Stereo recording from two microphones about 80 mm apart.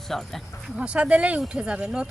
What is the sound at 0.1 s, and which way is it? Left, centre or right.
Speech, centre.